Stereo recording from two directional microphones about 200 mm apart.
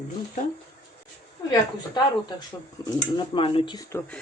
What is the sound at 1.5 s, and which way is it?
A woman's voice, 20° left (ahead or behind).